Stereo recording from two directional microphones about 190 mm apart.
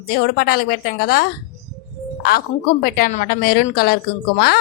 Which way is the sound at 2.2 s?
50° left (ahead or behind).